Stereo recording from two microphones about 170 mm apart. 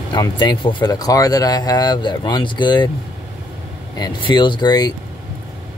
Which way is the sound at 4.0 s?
25° left (ahead or behind).